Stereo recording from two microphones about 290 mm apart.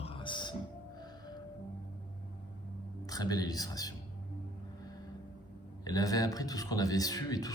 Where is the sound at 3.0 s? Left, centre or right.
Centre.